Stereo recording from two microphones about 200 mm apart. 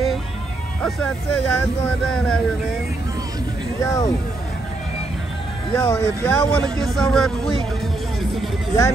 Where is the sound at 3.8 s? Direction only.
15° left (ahead or behind).